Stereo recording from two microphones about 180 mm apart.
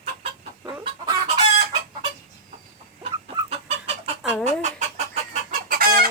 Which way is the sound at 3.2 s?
35° right (ahead or behind).